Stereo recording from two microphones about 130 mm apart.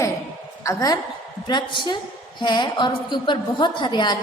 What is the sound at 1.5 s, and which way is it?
A woman's voice, 35° left (ahead or behind).